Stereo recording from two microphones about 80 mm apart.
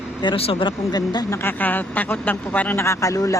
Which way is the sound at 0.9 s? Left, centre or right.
Left.